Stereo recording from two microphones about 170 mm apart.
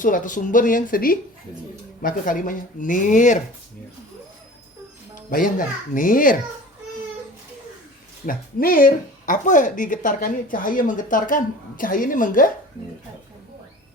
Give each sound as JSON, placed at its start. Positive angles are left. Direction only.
{"t": 0.0, "sound": "speech", "side_deg": 50}
{"t": 5.1, "sound": "speech", "side_deg": 50}
{"t": 8.3, "sound": "speech", "side_deg": 55}